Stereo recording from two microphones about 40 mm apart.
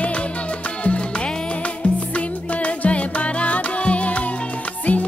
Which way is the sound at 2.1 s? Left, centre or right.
Left.